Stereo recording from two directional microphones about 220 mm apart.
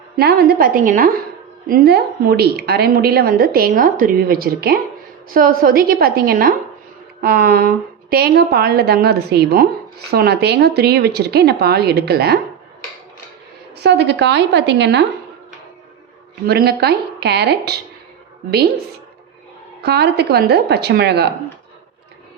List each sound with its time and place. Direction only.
0.2 s a woman's voice: 45° right (ahead or behind)
13.7 s a woman's voice: 50° right (ahead or behind)
16.5 s a woman's voice: 45° right (ahead or behind)
19.8 s a woman's voice: 50° right (ahead or behind)